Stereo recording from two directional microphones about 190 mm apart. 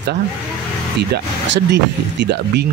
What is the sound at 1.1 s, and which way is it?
Speech, 65° right (ahead or behind).